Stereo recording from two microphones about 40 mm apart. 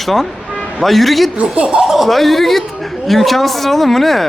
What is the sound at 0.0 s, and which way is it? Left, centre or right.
A man's voice, centre.